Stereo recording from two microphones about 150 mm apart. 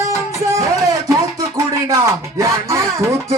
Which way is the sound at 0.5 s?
20° right (ahead or behind).